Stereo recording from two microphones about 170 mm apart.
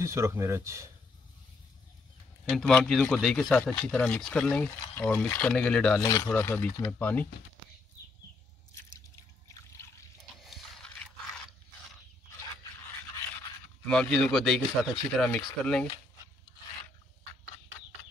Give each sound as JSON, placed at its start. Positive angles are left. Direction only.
{"t": 0.0, "sound": "speech", "side_deg": -15}
{"t": 2.4, "sound": "a man's voice", "side_deg": 5}
{"t": 5.9, "sound": "speech", "side_deg": 20}
{"t": 8.9, "sound": "drip", "side_deg": 20}
{"t": 10.4, "sound": "pig", "side_deg": 0}
{"t": 13.8, "sound": "a man's voice", "side_deg": 5}